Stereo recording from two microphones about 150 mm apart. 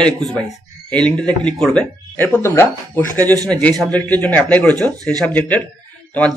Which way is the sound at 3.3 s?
25° right (ahead or behind).